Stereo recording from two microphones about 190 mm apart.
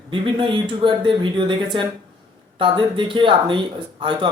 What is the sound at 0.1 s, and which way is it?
Speech, 25° right (ahead or behind).